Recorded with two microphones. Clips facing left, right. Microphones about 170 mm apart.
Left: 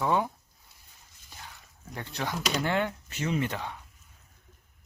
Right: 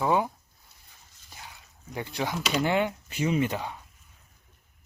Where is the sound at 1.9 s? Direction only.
10° right (ahead or behind).